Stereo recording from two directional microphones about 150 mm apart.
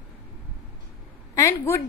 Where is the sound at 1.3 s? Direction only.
20° left (ahead or behind).